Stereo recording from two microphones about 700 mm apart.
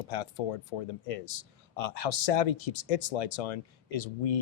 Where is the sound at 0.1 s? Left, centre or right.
Left.